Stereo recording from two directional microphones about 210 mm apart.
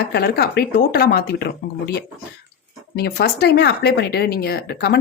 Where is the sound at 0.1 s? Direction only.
50° left (ahead or behind).